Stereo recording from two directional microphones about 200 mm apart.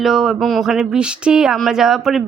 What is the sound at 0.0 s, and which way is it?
Speech, centre (ahead or behind).